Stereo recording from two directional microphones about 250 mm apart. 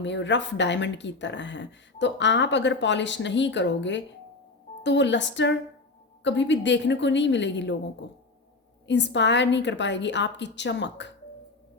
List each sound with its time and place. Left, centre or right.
0.0 s speech: left
8.9 s speech: left